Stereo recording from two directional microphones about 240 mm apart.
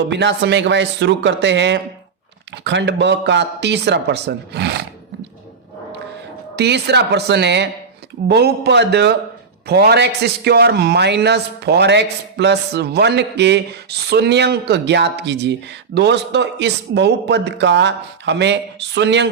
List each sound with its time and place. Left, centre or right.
0.1 s a man's voice: right
6.6 s a man's voice: right